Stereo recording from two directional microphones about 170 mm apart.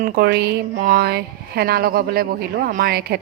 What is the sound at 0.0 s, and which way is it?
A woman's voice, 65° right (ahead or behind).